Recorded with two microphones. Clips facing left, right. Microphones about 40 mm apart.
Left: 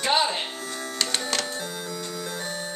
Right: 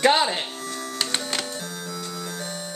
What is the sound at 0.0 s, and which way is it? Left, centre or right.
Speech, right.